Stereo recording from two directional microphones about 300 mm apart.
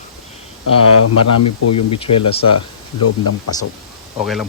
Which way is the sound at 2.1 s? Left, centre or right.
Left.